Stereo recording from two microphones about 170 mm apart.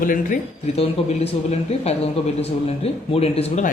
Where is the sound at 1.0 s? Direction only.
35° left (ahead or behind).